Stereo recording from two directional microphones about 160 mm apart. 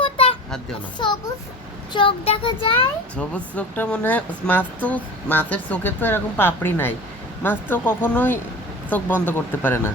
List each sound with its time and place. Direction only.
0.0 s a sound: 35° left (ahead or behind)
1.0 s a child's voice: 30° left (ahead or behind)
3.2 s speech: 10° left (ahead or behind)